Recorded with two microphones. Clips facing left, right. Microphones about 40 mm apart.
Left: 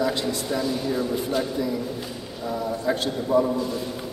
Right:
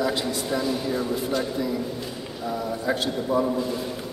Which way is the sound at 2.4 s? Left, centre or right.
Centre.